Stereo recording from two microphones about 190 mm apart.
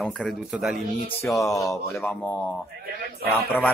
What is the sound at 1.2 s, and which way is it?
Speech, 15° left (ahead or behind).